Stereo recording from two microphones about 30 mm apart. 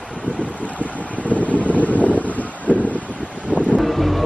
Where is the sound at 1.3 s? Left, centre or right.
Left.